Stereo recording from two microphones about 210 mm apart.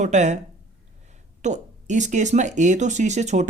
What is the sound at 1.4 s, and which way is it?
Speech, 35° right (ahead or behind).